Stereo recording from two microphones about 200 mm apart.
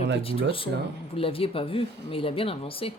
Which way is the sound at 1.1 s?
30° left (ahead or behind).